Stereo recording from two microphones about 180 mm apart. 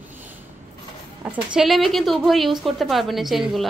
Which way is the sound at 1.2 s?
5° right (ahead or behind).